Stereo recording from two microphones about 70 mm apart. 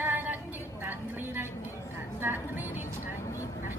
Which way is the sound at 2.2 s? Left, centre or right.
Right.